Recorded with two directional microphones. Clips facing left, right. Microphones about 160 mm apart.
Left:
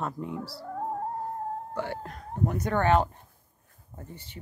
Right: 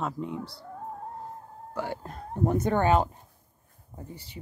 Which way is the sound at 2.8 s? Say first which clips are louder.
Even; 10° right (ahead or behind).